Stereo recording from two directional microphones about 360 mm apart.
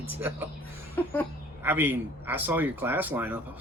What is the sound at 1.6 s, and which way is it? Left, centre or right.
A man's voice, centre.